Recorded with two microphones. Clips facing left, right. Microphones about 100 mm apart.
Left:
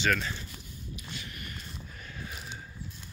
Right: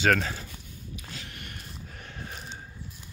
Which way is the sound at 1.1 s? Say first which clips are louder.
Even; 80° right.